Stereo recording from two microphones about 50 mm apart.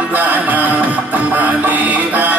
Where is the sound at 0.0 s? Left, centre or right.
Right.